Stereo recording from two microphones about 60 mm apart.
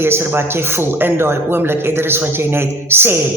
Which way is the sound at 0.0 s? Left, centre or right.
Right.